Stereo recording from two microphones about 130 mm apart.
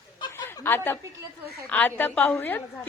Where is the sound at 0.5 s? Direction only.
20° left (ahead or behind).